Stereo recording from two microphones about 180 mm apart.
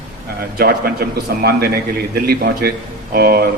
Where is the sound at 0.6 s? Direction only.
55° right (ahead or behind).